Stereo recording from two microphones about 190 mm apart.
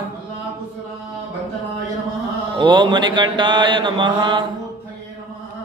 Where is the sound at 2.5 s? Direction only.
25° right (ahead or behind).